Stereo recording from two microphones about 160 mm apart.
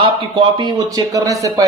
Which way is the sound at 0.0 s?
30° right (ahead or behind).